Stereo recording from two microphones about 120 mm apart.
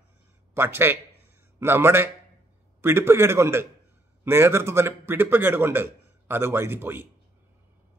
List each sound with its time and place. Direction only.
0.6 s speech: 20° right (ahead or behind)